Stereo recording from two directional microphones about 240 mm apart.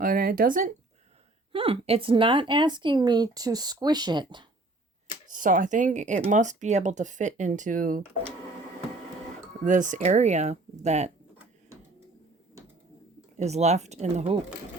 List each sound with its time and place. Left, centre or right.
0.0 s speech: right
1.5 s speech: right
5.3 s speech: right
9.6 s speech: right
13.3 s speech: right